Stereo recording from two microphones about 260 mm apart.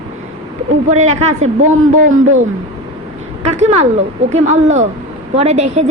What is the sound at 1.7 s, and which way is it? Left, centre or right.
Speech, right.